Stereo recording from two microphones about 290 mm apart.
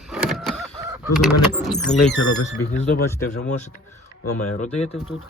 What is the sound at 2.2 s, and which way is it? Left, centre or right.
Speech, left.